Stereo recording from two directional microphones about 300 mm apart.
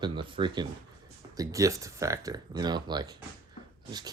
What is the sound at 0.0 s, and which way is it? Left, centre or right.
Speech, centre.